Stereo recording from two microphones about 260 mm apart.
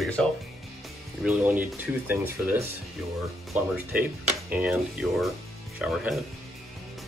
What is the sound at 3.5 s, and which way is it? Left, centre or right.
Speech, centre.